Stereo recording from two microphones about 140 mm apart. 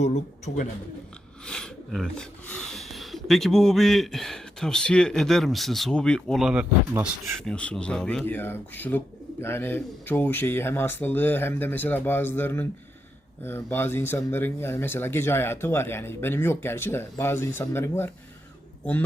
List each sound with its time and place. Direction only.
0.0 s a man's voice: 55° left (ahead or behind)
1.5 s speech: 5° left (ahead or behind)
7.3 s speech: 5° left (ahead or behind)
8.2 s speech: 15° left (ahead or behind)